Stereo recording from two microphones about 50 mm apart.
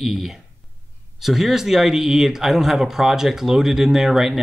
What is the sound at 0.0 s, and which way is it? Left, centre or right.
Speech, centre.